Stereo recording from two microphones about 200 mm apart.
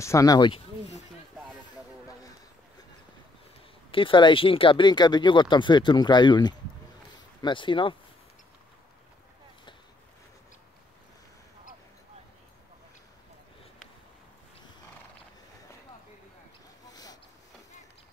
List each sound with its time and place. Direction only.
0.0 s speech: 15° left (ahead or behind)
3.9 s speech: 25° left (ahead or behind)
16.8 s a sound: 20° left (ahead or behind)